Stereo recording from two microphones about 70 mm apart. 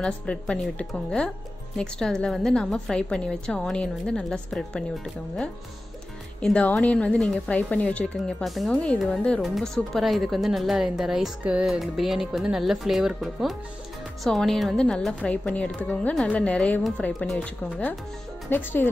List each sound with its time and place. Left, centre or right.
0.0 s a woman's voice: centre
4.2 s a woman's voice: centre
8.9 s a woman's voice: centre
18.5 s a woman's voice: left